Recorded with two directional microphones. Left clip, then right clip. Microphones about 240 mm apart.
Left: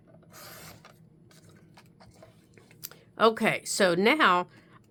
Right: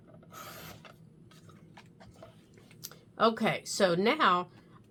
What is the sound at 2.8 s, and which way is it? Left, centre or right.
Speech, left.